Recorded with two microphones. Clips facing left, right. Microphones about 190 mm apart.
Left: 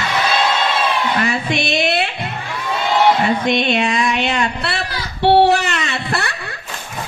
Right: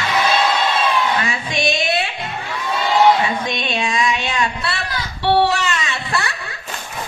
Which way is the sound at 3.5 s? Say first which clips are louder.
Left 6 dB; 60° left (ahead or behind).